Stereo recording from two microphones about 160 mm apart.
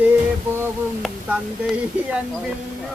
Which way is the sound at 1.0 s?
5° right (ahead or behind).